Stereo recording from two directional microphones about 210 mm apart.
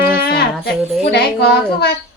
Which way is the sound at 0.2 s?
50° left (ahead or behind).